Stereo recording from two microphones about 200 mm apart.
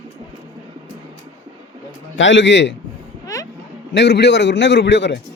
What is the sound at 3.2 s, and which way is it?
Music, 15° left (ahead or behind).